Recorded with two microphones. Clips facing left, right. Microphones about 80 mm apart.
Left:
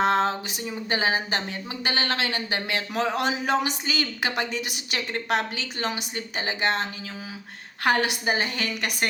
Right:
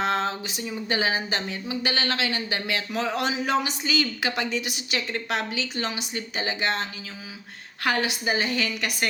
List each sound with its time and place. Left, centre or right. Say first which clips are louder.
0.0 s a sound: left 3 dB; left
0.7 s speech: left 1 dB; left
7.9 s speech: left 2 dB; left